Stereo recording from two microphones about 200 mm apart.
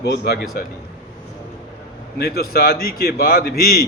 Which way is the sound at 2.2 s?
50° left (ahead or behind).